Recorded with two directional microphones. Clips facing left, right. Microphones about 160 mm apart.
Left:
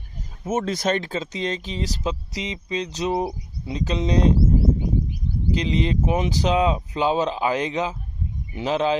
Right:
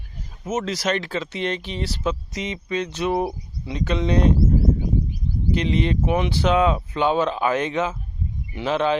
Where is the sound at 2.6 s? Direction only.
25° left (ahead or behind).